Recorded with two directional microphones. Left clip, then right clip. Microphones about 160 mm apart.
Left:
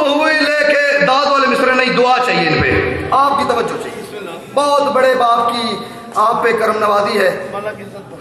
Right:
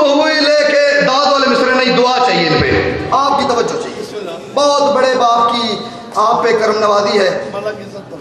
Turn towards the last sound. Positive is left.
turn(degrees=-20)  # may be behind; listen again after turning